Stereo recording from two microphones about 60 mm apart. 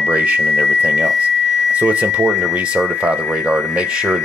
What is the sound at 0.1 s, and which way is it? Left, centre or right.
Speech, right.